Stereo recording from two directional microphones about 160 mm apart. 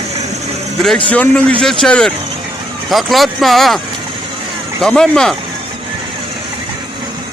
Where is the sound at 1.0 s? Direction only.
10° left (ahead or behind).